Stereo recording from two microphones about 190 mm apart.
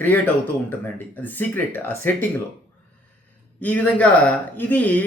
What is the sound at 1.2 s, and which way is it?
Speech, 10° left (ahead or behind).